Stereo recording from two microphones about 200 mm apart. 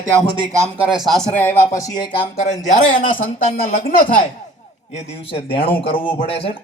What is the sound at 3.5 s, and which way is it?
Speech, 45° left (ahead or behind).